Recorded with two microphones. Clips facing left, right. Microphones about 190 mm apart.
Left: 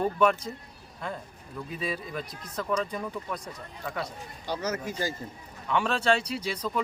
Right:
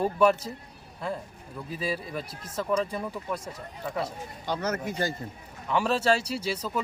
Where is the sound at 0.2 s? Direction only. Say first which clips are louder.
Right 4 dB; 5° right (ahead or behind).